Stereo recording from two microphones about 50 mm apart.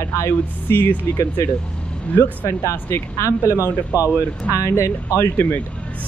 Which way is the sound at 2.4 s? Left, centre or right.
Left.